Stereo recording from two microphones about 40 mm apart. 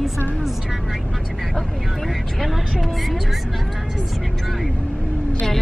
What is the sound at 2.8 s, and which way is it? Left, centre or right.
Speech, centre.